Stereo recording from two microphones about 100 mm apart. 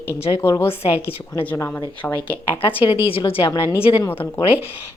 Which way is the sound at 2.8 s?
65° left (ahead or behind).